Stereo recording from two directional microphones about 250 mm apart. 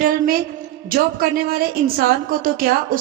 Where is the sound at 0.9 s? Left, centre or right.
Right.